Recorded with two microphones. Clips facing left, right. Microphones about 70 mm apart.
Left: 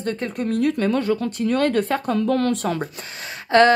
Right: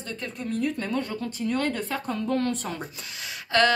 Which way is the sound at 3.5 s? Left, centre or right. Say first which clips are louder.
Left 7 dB; left.